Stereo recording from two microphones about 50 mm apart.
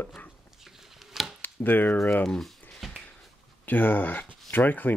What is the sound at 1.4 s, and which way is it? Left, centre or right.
Speech, left.